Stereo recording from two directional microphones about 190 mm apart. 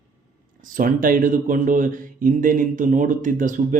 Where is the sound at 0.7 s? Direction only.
45° right (ahead or behind).